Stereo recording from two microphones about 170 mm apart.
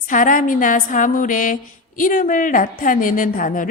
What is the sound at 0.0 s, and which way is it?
A woman's voice, 50° left (ahead or behind).